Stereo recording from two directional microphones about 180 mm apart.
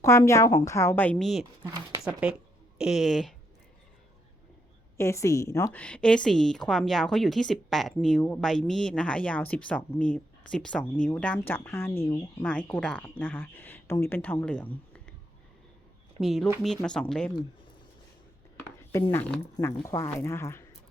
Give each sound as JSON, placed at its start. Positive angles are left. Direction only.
{"t": 0.0, "sound": "a woman's voice", "side_deg": 15}
{"t": 4.9, "sound": "a woman's voice", "side_deg": 15}
{"t": 16.2, "sound": "a woman's voice", "side_deg": 0}
{"t": 19.1, "sound": "speech", "side_deg": 10}
{"t": 19.5, "sound": "speech", "side_deg": 20}